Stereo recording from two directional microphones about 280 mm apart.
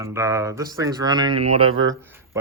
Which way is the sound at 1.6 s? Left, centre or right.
Right.